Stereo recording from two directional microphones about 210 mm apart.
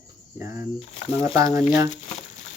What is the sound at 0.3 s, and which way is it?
Speech, 10° right (ahead or behind).